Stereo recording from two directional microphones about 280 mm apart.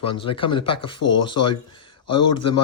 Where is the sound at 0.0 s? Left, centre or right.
Centre.